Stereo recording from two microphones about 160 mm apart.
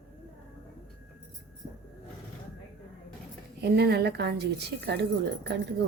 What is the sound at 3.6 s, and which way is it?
A woman's voice, 85° right.